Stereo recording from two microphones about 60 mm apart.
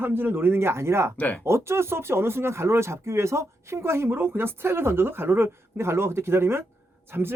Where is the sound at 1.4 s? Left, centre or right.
Right.